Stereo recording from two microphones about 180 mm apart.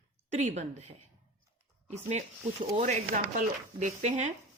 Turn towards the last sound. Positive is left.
turn(degrees=-40)  # may be behind; listen again after turning